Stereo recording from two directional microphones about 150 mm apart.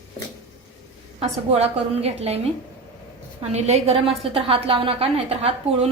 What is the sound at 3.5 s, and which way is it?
A woman's voice, 45° right (ahead or behind).